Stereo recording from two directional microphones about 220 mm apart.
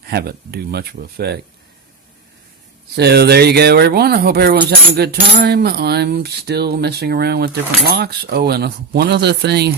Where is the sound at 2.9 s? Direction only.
50° right (ahead or behind).